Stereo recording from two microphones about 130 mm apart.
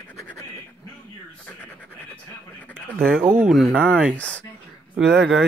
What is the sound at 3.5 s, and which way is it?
Speech, centre (ahead or behind).